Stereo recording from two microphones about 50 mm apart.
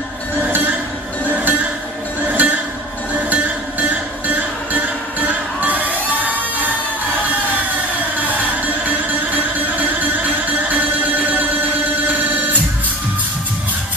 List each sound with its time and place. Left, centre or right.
0.5 s a sound: right
2.2 s music: right
8.8 s music: right